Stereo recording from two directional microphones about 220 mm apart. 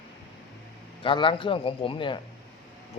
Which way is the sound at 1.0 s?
20° left (ahead or behind).